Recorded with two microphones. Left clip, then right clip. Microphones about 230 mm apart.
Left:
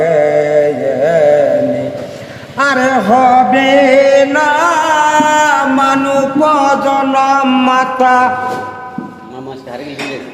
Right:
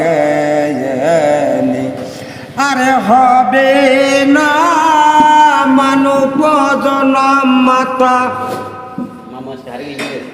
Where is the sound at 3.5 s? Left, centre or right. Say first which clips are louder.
Right 1 dB; centre.